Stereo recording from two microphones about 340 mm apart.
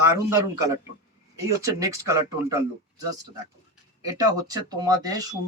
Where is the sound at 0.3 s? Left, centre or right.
Centre.